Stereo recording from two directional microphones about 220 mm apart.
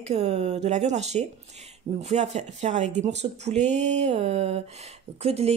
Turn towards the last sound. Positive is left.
turn(degrees=-30)  # may be behind; listen again after turning